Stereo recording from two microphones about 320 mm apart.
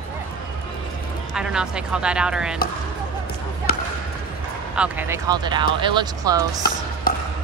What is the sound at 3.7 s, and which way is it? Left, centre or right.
Basketball bounce, left.